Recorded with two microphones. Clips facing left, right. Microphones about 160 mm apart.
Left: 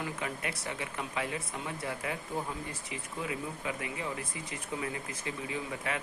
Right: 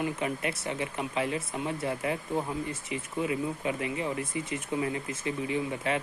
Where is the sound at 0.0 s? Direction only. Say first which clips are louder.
Right 6 dB; 25° right (ahead or behind).